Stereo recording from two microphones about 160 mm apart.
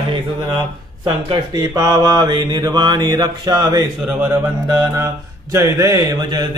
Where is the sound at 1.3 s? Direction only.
25° right (ahead or behind).